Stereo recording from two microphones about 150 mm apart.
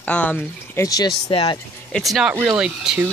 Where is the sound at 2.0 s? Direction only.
Centre (ahead or behind).